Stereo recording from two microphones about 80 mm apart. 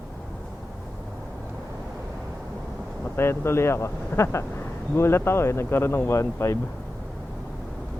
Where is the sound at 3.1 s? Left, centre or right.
Left.